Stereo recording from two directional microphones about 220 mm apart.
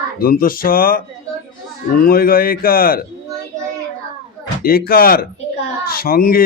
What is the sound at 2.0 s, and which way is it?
Speech, 40° left (ahead or behind).